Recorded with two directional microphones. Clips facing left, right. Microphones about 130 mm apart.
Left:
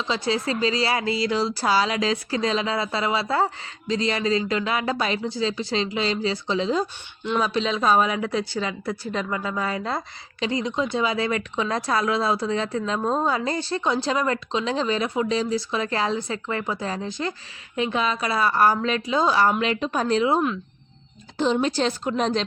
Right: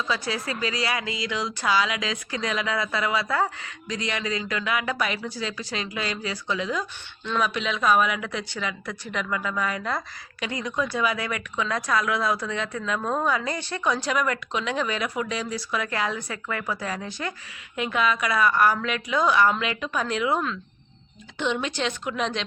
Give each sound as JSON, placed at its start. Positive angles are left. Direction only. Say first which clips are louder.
{"t": 0.0, "sound": "speech", "louder": "left 4 dB", "side_deg": 25}
{"t": 21.3, "sound": "speech", "louder": "left 5 dB", "side_deg": 35}